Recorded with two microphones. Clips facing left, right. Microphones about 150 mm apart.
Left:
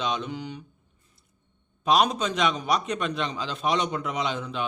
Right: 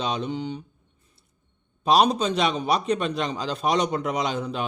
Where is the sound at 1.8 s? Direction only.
35° right (ahead or behind).